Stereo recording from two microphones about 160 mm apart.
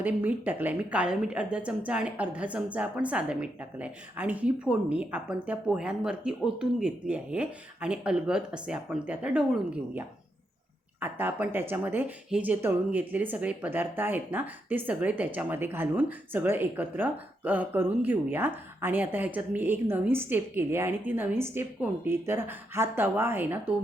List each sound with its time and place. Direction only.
0.0 s speech: 10° right (ahead or behind)
11.0 s speech: 10° right (ahead or behind)